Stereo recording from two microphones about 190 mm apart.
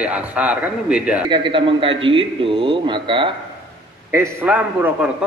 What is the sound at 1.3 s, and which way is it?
A man's voice, 25° right (ahead or behind).